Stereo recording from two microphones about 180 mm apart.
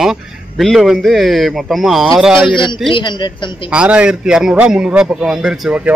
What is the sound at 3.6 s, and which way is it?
A man's voice, 5° right (ahead or behind).